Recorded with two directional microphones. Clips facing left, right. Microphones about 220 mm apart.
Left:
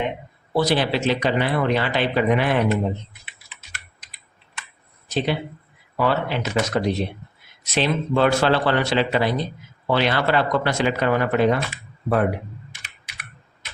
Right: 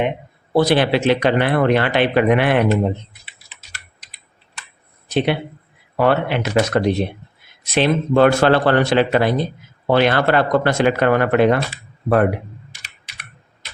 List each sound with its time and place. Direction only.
0.5 s speech: 60° right (ahead or behind)
5.0 s speech: 60° right (ahead or behind)